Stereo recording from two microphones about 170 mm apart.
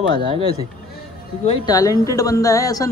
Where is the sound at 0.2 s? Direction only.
30° right (ahead or behind).